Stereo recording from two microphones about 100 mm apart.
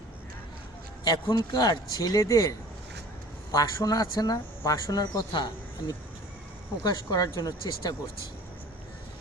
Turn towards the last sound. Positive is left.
turn(degrees=40)  # may be behind; listen again after turning